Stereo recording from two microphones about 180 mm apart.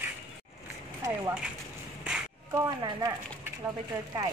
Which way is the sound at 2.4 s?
20° right (ahead or behind).